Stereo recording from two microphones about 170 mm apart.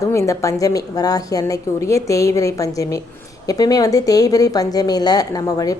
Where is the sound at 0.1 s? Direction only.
20° left (ahead or behind).